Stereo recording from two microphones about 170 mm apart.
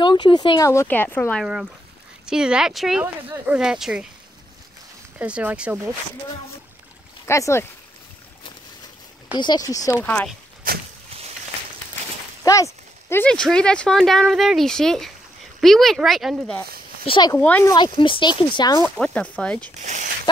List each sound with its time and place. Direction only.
0.0 s speech: 25° left (ahead or behind); by 1.4 s 10° left (ahead or behind)
1.4 s speech: centre (ahead or behind)
5.2 s speech: 10° right (ahead or behind)
7.2 s speech: 15° left (ahead or behind)
9.4 s speech: 25° left (ahead or behind)
10.7 s a sound: 60° right (ahead or behind)
12.4 s speech: 20° left (ahead or behind); by 16.5 s centre (ahead or behind)
17.0 s speech: 30° left (ahead or behind)
17.4 s speech: 10° left (ahead or behind)
17.7 s speech: 30° left (ahead or behind)
18.9 s speech: 10° left (ahead or behind)
19.8 s speech: 45° right (ahead or behind)